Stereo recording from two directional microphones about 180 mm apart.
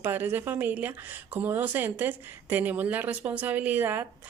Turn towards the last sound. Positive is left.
turn(degrees=-10)  # may be behind; listen again after turning